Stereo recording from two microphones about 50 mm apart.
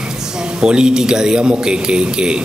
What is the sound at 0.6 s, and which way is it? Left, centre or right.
A man's voice, centre.